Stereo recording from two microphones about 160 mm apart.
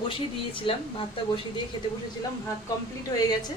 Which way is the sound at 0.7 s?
35° left (ahead or behind).